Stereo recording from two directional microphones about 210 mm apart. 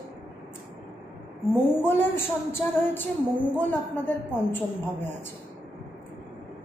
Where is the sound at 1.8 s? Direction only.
10° left (ahead or behind).